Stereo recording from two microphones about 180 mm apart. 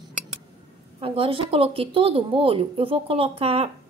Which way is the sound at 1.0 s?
30° right (ahead or behind).